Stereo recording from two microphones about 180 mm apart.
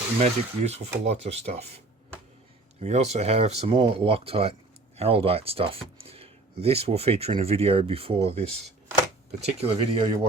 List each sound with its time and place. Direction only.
0.2 s speech: 35° right (ahead or behind)
2.8 s speech: 40° right (ahead or behind)